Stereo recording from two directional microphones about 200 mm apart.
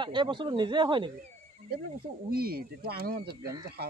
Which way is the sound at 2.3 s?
50° right (ahead or behind).